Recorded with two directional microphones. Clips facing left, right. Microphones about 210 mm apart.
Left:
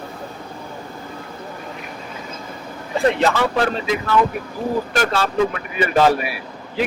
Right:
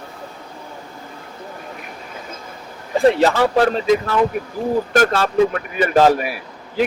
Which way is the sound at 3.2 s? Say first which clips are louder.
Right 3 dB; 40° right (ahead or behind).